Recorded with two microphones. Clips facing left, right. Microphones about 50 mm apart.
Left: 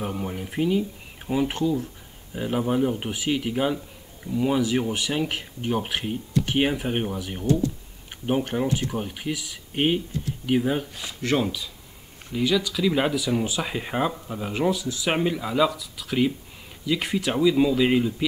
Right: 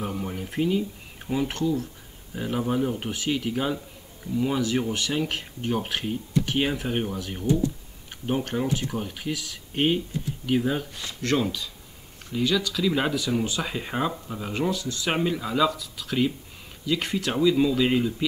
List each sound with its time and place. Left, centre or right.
0.0 s speech: centre